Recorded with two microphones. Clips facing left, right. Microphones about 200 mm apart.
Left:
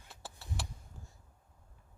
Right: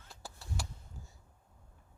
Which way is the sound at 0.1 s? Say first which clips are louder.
Even; centre (ahead or behind).